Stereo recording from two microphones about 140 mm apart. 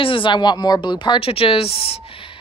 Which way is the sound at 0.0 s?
40° left (ahead or behind).